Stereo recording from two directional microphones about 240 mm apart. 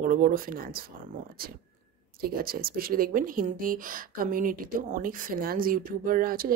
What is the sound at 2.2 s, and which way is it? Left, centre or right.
Speech, right.